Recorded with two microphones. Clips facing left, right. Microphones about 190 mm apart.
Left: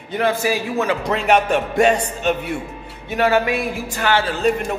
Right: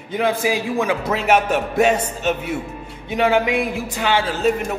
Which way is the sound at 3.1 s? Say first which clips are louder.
Even; 15° right (ahead or behind).